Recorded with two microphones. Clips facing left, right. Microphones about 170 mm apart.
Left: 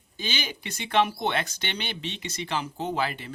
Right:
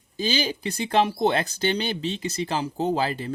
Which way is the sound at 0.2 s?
35° right (ahead or behind).